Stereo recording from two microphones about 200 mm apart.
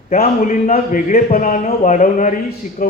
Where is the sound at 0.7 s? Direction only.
40° left (ahead or behind).